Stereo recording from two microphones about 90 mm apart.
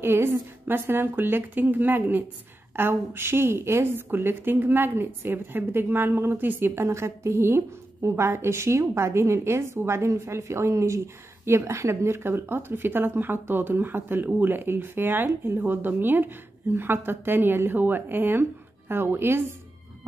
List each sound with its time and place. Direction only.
0.0 s a woman's voice: 25° right (ahead or behind)